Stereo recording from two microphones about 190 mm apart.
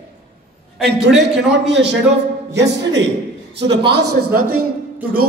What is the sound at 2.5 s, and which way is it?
Speech, 65° right (ahead or behind).